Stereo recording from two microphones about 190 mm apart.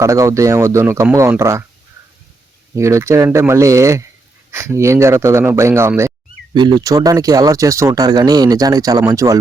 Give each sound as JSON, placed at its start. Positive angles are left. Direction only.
{"t": 0.0, "sound": "speech", "side_deg": -15}
{"t": 2.7, "sound": "speech", "side_deg": -15}